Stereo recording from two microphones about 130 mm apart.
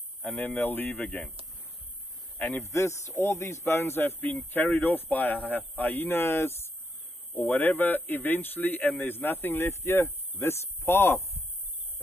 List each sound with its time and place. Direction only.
0.2 s a man's voice: 10° left (ahead or behind)
2.3 s a man's voice: 15° left (ahead or behind)